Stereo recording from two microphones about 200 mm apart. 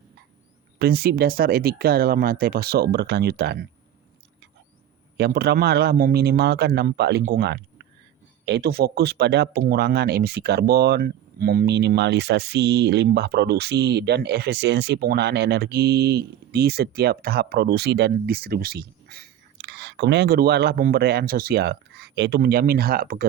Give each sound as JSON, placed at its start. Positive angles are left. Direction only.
{"t": 0.8, "sound": "speech", "side_deg": -50}
{"t": 5.1, "sound": "speech", "side_deg": -55}